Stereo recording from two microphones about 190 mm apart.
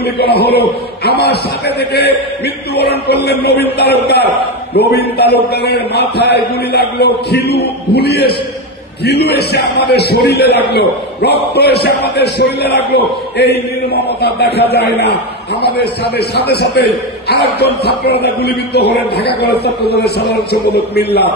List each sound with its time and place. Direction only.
0.0 s a man's voice: 60° left (ahead or behind)
16.2 s a man's voice: 60° left (ahead or behind)